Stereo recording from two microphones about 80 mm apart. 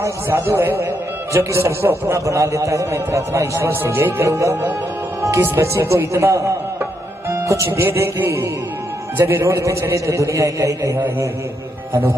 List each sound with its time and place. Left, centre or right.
0.0 s a man's voice: right
5.2 s music: right
5.6 s a man's voice: right
6.8 s music: right
7.4 s a man's voice: right
7.8 s a man's voice: right